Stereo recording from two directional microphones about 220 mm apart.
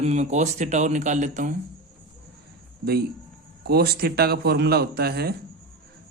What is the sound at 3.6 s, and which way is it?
Speech, 45° right (ahead or behind).